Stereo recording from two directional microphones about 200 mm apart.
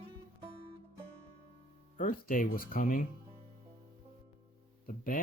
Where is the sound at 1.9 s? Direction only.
40° left (ahead or behind).